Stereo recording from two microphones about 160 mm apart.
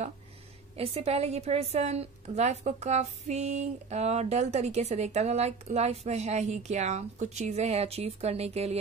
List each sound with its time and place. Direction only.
0.7 s a woman's voice: 40° right (ahead or behind)